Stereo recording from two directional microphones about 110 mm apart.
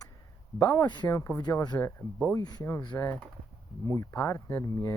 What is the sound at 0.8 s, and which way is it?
Speech, 40° left (ahead or behind).